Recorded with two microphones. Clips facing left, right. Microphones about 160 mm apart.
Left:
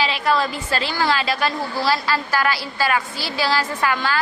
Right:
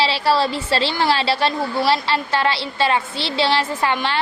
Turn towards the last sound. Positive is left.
turn(degrees=-25)  # may be behind; listen again after turning